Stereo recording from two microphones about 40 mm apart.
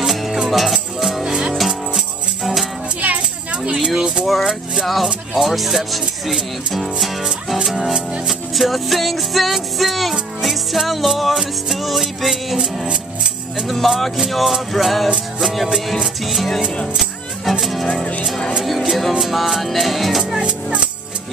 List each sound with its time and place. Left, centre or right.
0.0 s music: centre
4.0 s music: right
4.8 s music: centre
13.6 s music: centre